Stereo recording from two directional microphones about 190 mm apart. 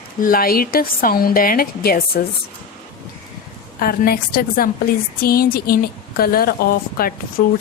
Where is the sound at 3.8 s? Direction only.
50° left (ahead or behind).